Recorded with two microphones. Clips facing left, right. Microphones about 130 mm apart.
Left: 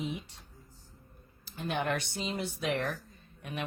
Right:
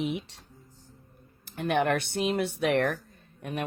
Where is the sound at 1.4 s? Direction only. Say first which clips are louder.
Right 7 dB; 60° right (ahead or behind).